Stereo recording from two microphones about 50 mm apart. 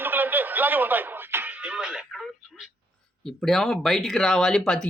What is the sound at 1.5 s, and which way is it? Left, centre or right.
Music, right.